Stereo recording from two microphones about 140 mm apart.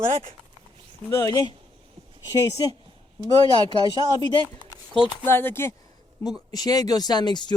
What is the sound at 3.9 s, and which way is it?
Speech, 30° left (ahead or behind).